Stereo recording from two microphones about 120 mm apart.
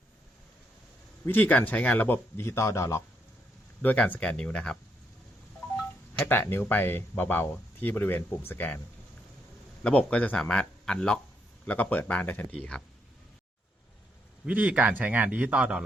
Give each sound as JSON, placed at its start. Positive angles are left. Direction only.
{"t": 1.2, "sound": "speech", "side_deg": 15}
{"t": 3.8, "sound": "speech", "side_deg": 10}
{"t": 6.1, "sound": "speech", "side_deg": 15}
{"t": 9.8, "sound": "speech", "side_deg": 10}
{"t": 14.4, "sound": "a man's voice", "side_deg": -10}